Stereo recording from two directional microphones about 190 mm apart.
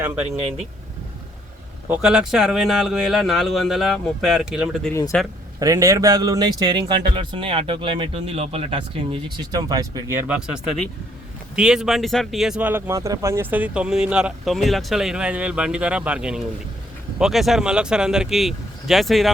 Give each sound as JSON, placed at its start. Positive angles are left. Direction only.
{"t": 1.9, "sound": "speech", "side_deg": -5}
{"t": 5.5, "sound": "speech", "side_deg": -20}
{"t": 9.4, "sound": "speech", "side_deg": -20}